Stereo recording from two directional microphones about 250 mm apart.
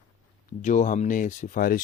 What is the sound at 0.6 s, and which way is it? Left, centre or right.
Speech, left.